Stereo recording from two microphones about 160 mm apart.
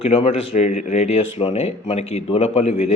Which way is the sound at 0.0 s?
35° left (ahead or behind).